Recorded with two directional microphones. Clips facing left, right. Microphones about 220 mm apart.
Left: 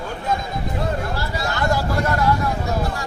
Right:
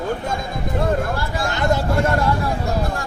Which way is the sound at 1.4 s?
20° right (ahead or behind).